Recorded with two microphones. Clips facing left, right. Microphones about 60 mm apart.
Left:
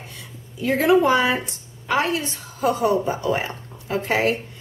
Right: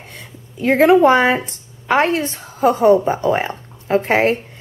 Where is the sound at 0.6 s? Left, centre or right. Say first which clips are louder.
Right 6 dB; right.